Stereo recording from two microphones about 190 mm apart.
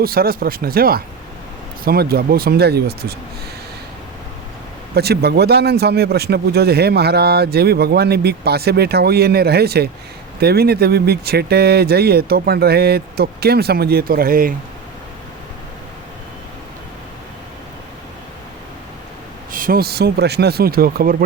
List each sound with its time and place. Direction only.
0.0 s speech: 50° right (ahead or behind)
4.9 s speech: 55° right (ahead or behind)
19.5 s speech: 45° right (ahead or behind)